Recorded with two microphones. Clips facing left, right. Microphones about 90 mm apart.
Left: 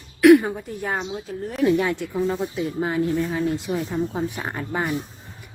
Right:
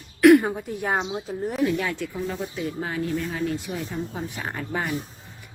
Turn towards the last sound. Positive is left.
turn(degrees=20)  # may be behind; listen again after turning